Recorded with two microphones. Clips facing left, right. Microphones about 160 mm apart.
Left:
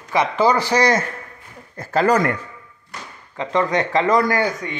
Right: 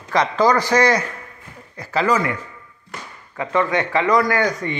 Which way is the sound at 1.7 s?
50° left (ahead or behind).